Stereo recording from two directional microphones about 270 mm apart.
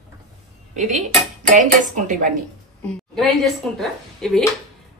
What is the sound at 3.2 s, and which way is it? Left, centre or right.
A woman's voice, centre.